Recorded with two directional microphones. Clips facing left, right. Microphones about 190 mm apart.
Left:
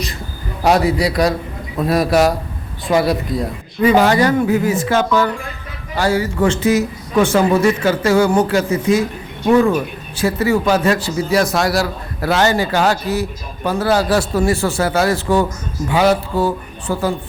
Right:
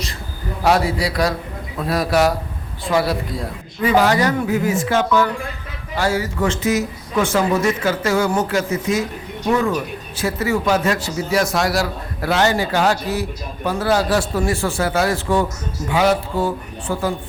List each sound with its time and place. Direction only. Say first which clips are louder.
0.6 s a man's voice: left 3 dB; 20° left (ahead or behind)
10.2 s a man's voice: left 4 dB; 30° left (ahead or behind)